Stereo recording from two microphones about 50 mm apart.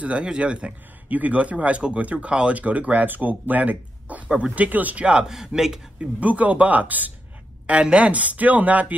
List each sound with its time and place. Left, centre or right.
0.0 s speech: right
1.0 s speech: right
5.3 s a man's voice: centre
6.1 s speech: right
7.6 s speech: right